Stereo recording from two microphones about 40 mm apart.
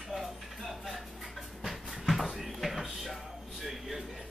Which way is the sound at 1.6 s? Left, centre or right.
Centre.